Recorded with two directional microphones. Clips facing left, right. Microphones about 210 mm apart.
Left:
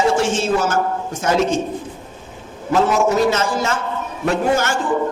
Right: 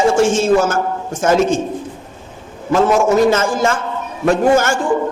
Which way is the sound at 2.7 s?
50° right (ahead or behind).